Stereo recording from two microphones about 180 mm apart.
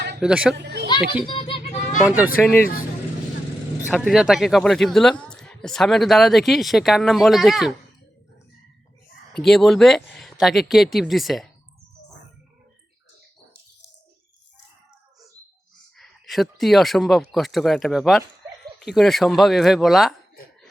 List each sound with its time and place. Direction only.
0.2 s speech: 5° right (ahead or behind)
0.5 s a child's voice: 70° right (ahead or behind)
1.2 s music: 30° left (ahead or behind)
2.4 s speech: 10° left (ahead or behind)
3.8 s speech: 5° right (ahead or behind)
9.4 s speech: centre (ahead or behind)
16.0 s speech: centre (ahead or behind)